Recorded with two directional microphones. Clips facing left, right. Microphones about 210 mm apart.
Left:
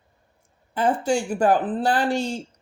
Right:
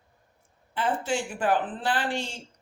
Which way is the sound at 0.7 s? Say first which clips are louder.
Left 6 dB; 40° left (ahead or behind).